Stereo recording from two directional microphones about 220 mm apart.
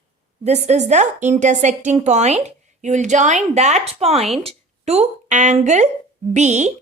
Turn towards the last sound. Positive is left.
turn(degrees=-30)  # may be behind; listen again after turning